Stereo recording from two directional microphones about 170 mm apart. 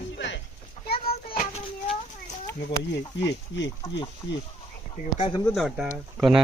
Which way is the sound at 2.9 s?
90° left.